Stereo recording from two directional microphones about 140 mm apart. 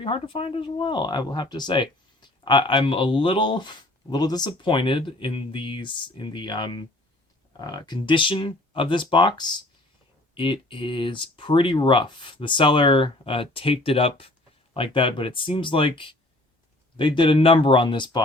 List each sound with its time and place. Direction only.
0.0 s speech: 40° left (ahead or behind)